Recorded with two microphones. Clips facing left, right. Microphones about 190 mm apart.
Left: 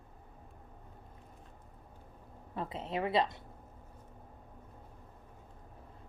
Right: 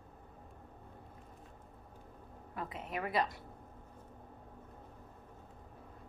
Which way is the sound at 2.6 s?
30° left (ahead or behind).